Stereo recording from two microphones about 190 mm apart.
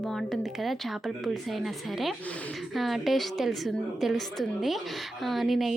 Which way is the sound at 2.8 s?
Centre (ahead or behind).